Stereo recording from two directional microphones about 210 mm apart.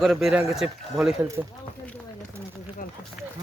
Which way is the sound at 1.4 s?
15° right (ahead or behind).